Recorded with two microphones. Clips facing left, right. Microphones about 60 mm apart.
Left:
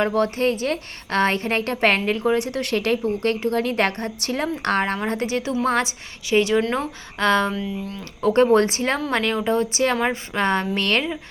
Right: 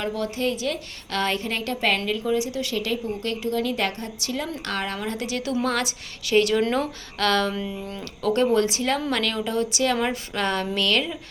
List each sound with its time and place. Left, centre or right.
0.0 s a woman's voice: left
7.5 s speech: centre
8.2 s a woman's voice: left
9.0 s speech: left